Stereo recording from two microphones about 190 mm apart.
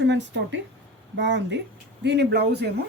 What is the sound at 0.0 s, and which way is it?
Speech, 70° right (ahead or behind).